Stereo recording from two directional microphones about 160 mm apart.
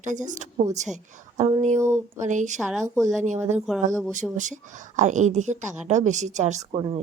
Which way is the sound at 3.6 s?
Centre (ahead or behind).